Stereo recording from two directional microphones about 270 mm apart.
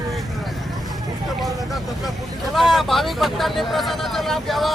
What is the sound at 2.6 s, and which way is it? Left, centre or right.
Speech, centre.